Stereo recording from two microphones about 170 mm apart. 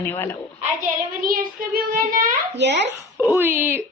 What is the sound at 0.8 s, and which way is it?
A child's voice, 55° right (ahead or behind).